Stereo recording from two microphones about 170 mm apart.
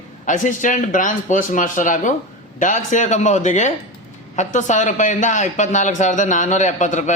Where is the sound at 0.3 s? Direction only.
45° left (ahead or behind).